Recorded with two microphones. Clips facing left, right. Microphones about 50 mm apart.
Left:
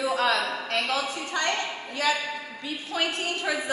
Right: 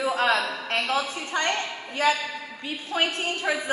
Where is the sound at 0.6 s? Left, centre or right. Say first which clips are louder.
Right 1 dB; right.